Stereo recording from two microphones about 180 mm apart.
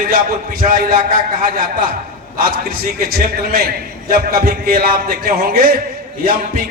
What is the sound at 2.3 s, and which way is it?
A man's voice, 55° right (ahead or behind).